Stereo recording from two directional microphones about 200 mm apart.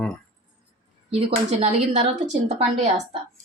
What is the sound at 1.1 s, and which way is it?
Speech, 35° right (ahead or behind).